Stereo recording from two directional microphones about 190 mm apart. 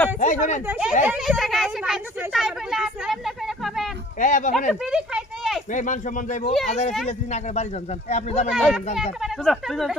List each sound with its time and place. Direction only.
0.2 s a man's voice: 40° left (ahead or behind)
0.7 s speech: 5° right (ahead or behind)
4.2 s a man's voice: 40° left (ahead or behind)
4.8 s a sound: 5° right (ahead or behind)
5.7 s a man's voice: 40° left (ahead or behind)
8.5 s speech: centre (ahead or behind)